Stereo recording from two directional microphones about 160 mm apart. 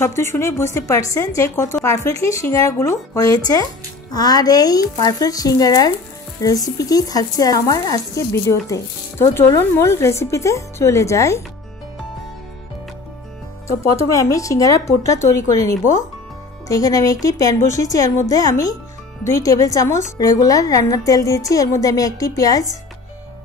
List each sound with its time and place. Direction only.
0.0 s speech: 15° left (ahead or behind)
13.7 s speech: 20° left (ahead or behind)